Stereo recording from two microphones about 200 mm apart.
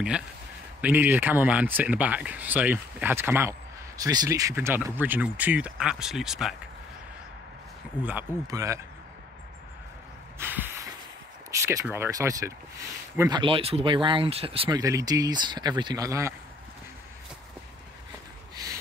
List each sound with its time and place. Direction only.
0.7 s speech: 10° right (ahead or behind)
8.0 s speech: 10° right (ahead or behind)
10.4 s snort: 10° right (ahead or behind)
11.6 s speech: 10° right (ahead or behind)
13.4 s speech: 25° right (ahead or behind)